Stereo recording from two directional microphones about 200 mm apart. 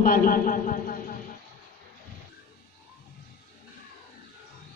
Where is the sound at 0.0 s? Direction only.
45° left (ahead or behind).